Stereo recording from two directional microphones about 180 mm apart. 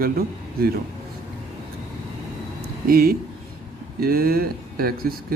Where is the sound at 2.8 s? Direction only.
55° right (ahead or behind).